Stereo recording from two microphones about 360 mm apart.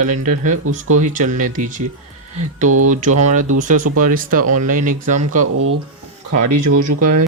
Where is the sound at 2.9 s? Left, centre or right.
Right.